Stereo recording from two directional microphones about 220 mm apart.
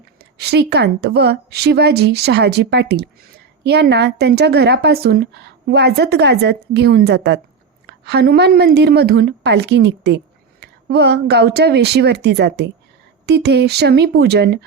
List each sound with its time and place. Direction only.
0.2 s a woman's voice: 45° right (ahead or behind)